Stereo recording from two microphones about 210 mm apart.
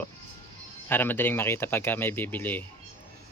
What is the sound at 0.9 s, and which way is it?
Speech, 10° left (ahead or behind).